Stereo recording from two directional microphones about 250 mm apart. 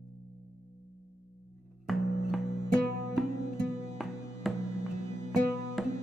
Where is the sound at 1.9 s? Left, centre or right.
Centre.